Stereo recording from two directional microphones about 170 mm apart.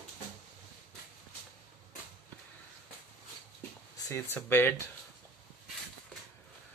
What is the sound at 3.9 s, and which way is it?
Speech, 15° left (ahead or behind).